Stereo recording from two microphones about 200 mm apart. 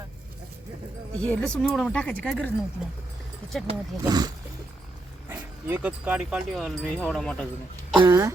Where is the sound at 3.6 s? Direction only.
20° right (ahead or behind).